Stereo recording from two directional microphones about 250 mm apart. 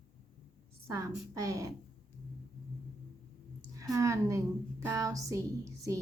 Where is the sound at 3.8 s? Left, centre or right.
Centre.